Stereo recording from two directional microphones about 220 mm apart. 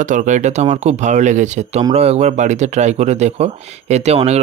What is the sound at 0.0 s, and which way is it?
Speech, 35° right (ahead or behind).